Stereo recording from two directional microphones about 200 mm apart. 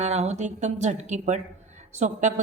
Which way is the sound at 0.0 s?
35° right (ahead or behind).